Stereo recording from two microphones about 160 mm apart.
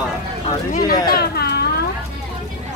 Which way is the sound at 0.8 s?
70° left (ahead or behind).